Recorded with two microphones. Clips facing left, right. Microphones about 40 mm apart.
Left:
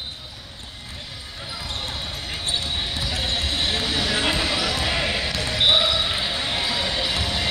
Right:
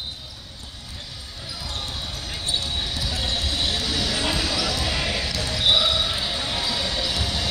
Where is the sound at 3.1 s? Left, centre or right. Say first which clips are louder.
Left 2 dB; left.